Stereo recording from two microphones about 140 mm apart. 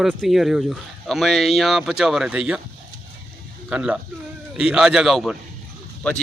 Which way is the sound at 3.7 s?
10° right (ahead or behind).